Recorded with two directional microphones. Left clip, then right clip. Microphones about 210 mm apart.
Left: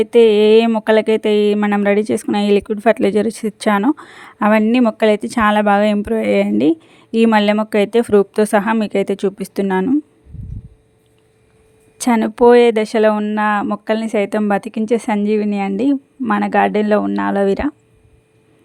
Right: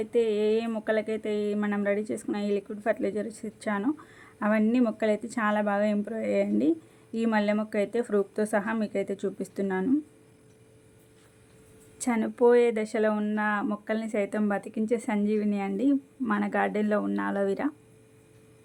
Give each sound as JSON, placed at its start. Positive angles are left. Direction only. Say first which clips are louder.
{"t": 0.0, "sound": "speech", "louder": "left 15 dB", "side_deg": 45}
{"t": 11.9, "sound": "speech", "louder": "left 12 dB", "side_deg": 45}